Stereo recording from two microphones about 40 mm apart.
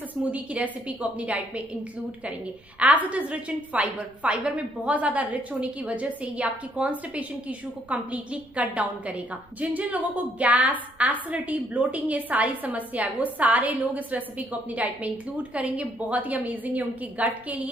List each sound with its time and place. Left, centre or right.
0.1 s a woman's voice: right
2.8 s a woman's voice: right